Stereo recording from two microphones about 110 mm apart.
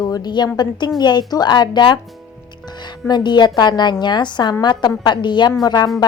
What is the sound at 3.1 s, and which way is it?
A woman's voice, 40° left (ahead or behind).